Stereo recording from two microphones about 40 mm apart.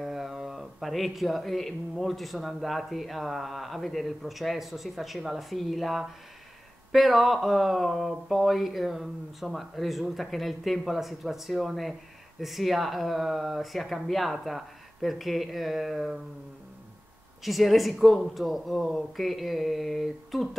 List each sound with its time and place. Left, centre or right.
0.0 s speech: centre
17.4 s speech: centre